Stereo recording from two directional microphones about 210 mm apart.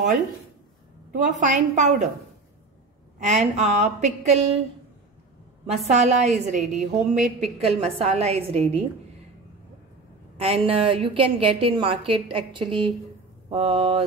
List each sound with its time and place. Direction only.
1.1 s speech: 40° right (ahead or behind)
3.2 s speech: 35° right (ahead or behind)
5.9 s a woman's voice: 35° right (ahead or behind)
10.4 s a woman's voice: 25° right (ahead or behind)